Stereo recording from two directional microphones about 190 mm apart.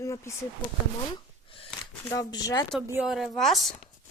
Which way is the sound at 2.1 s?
15° left (ahead or behind).